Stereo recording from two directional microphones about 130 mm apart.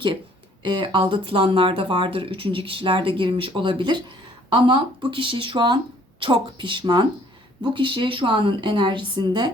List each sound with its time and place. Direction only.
0.6 s speech: 40° right (ahead or behind)